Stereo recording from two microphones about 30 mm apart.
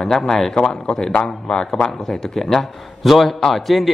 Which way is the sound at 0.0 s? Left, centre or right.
Centre.